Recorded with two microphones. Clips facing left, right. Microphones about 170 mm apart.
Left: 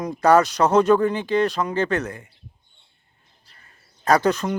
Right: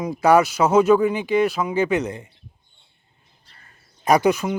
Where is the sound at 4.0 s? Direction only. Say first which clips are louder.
Right 1 dB; 15° right (ahead or behind).